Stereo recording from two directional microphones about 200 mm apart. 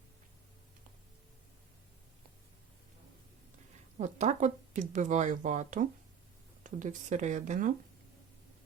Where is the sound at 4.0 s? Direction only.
35° right (ahead or behind).